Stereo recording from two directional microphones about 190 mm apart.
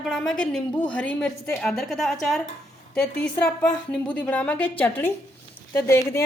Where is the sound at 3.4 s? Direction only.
5° left (ahead or behind).